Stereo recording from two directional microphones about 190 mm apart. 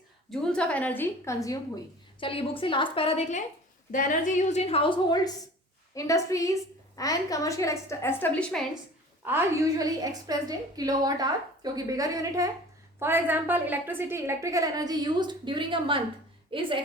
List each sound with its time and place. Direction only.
0.3 s a woman's voice: 5° left (ahead or behind)
2.2 s a woman's voice: 30° left (ahead or behind); by 8.6 s 5° left (ahead or behind)
9.2 s a woman's voice: 15° right (ahead or behind)